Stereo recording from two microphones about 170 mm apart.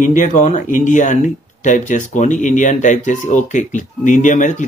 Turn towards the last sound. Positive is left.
turn(degrees=45)  # may be behind; listen again after turning